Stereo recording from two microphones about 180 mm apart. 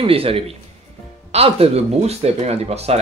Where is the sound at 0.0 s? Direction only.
30° right (ahead or behind).